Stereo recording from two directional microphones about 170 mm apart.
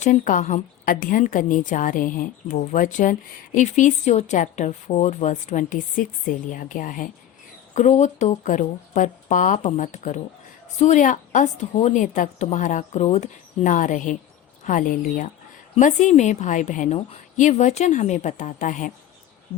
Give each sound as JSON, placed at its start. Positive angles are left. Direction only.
{"t": 0.0, "sound": "a woman's voice", "side_deg": 50}